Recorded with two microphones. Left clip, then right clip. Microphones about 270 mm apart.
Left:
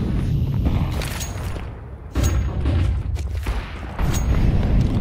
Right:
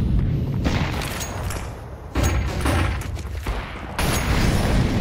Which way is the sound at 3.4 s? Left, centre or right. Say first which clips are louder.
Right 2 dB; centre.